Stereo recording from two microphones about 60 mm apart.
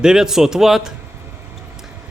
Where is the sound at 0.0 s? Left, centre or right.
Centre.